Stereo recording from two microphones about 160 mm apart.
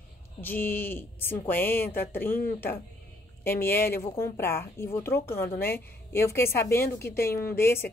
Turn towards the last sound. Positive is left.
turn(degrees=15)  # may be behind; listen again after turning